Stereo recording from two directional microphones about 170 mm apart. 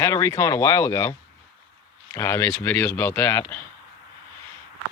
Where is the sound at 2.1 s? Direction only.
15° left (ahead or behind).